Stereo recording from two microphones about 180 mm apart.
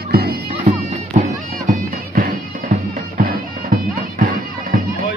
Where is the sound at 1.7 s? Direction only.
55° right (ahead or behind).